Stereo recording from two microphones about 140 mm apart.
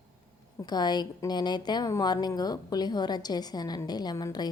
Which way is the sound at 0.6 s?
30° left (ahead or behind).